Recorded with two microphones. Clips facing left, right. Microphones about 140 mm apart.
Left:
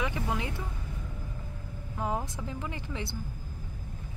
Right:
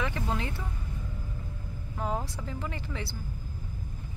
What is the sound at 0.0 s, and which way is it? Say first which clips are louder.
Vehicle: even; 15° left (ahead or behind).